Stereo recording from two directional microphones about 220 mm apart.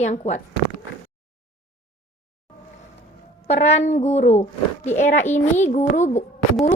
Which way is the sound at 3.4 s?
30° left (ahead or behind).